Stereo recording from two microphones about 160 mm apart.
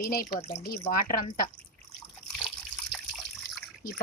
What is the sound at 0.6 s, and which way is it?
Speech, 65° left (ahead or behind).